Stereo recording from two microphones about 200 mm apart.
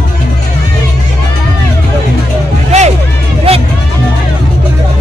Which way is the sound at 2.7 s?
30° right (ahead or behind).